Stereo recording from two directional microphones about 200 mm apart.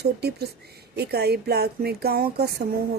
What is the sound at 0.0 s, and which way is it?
A woman's voice, 55° right (ahead or behind).